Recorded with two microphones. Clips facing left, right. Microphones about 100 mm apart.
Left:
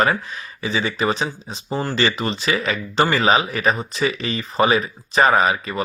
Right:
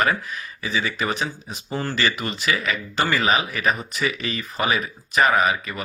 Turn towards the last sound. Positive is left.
turn(degrees=30)  # may be behind; listen again after turning